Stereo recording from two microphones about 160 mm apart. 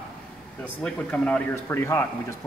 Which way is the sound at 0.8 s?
5° left (ahead or behind).